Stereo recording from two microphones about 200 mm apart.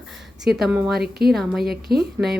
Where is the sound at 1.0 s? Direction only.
50° right (ahead or behind).